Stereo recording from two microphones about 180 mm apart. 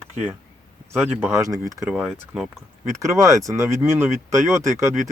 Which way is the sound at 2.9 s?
20° right (ahead or behind).